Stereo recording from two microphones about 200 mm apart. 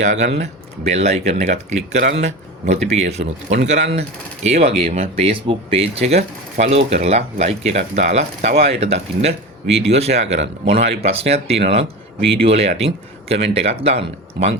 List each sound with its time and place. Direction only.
0.0 s speech: 35° right (ahead or behind)